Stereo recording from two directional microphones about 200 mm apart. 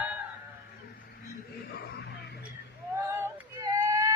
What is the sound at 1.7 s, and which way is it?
Music, 55° left (ahead or behind).